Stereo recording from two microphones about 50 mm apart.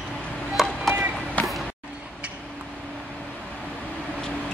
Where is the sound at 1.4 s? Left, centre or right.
Left.